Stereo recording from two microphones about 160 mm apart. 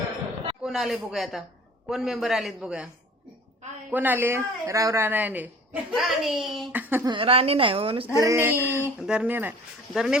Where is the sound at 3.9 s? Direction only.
10° right (ahead or behind).